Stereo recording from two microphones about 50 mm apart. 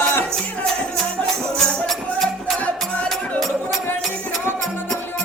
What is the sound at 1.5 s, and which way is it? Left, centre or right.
Music, centre.